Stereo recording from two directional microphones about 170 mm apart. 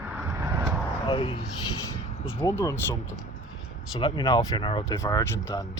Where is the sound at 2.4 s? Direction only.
15° left (ahead or behind).